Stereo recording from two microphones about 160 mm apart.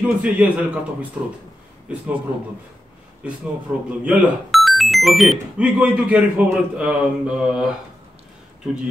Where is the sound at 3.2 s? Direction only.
5° right (ahead or behind).